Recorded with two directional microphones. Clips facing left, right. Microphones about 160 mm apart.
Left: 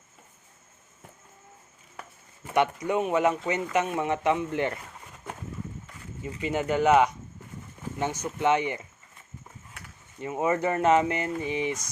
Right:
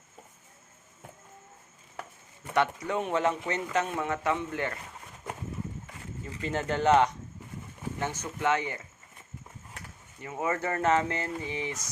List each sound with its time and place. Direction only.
2.4 s speech: 15° left (ahead or behind)
6.4 s speech: 10° left (ahead or behind)
10.2 s speech: 20° left (ahead or behind)